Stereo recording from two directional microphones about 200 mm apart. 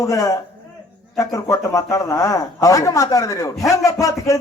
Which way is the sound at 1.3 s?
15° left (ahead or behind).